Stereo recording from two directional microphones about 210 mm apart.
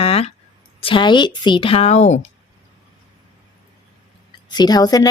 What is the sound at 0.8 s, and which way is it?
A woman's voice, 25° left (ahead or behind).